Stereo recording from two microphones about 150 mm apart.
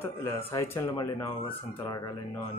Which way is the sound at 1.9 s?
25° left (ahead or behind).